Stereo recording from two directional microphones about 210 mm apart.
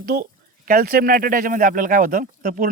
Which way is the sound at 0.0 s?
40° right (ahead or behind).